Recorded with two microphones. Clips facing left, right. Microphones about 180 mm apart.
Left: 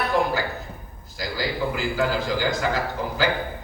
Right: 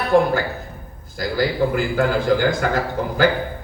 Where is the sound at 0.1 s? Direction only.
50° right (ahead or behind).